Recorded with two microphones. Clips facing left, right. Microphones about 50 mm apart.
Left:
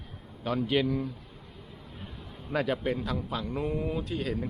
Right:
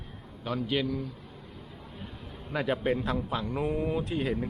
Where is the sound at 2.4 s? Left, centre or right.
Centre.